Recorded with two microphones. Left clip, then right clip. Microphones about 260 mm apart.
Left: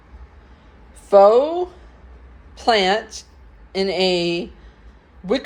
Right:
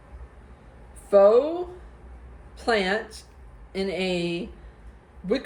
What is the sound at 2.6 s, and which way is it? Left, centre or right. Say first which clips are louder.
Speech: left 7 dB; left.